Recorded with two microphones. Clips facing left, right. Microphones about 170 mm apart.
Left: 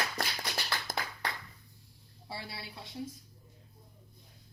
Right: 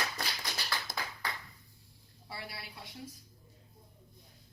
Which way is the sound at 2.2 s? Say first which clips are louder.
Left 2 dB; 25° left (ahead or behind).